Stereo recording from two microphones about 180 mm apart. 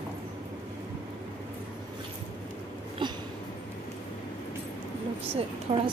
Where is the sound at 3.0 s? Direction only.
25° right (ahead or behind).